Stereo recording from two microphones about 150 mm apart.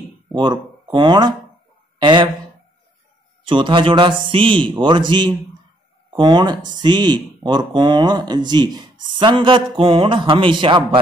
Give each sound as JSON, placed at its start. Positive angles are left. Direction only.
{"t": 0.3, "sound": "speech", "side_deg": -30}
{"t": 3.4, "sound": "a man's voice", "side_deg": -30}